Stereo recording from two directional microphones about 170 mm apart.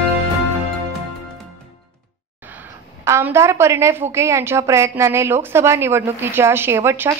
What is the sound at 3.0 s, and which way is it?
A woman's voice, 15° right (ahead or behind).